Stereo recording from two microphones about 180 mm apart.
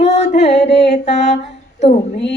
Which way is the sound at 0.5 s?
70° left (ahead or behind).